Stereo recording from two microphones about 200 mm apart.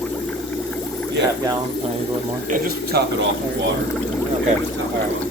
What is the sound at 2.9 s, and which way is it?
Speech, 55° right (ahead or behind).